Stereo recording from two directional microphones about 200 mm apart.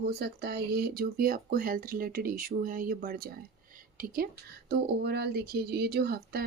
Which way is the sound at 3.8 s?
45° right (ahead or behind).